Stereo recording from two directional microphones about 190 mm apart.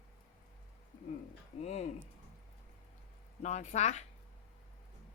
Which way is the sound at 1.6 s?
35° left (ahead or behind).